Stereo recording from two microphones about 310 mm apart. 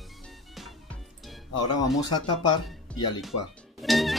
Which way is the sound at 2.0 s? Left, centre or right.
Centre.